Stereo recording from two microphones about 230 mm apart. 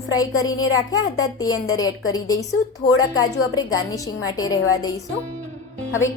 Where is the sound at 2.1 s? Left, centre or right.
Centre.